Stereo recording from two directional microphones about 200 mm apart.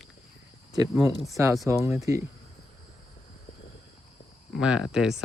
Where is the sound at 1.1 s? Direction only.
15° left (ahead or behind).